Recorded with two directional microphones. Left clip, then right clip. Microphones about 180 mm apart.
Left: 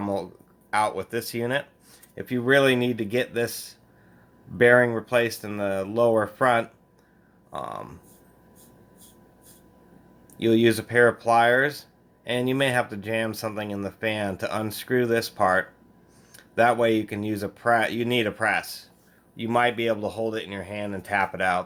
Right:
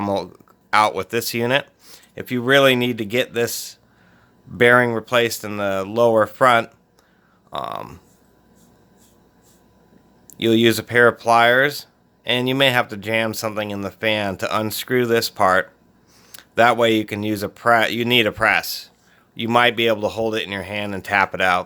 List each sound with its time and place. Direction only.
0.0 s speech: 45° right (ahead or behind)
10.3 s speech: 35° right (ahead or behind)